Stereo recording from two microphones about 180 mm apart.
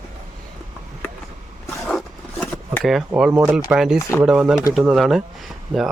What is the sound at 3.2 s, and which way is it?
Speech, 10° right (ahead or behind).